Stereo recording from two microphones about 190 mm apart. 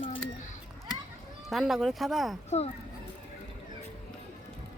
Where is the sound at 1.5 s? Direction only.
Centre (ahead or behind).